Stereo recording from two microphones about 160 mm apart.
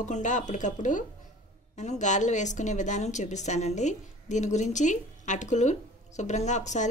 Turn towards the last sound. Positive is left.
turn(degrees=50)  # may be behind; listen again after turning